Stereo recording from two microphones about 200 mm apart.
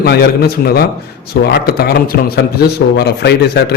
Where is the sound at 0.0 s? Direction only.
50° left (ahead or behind).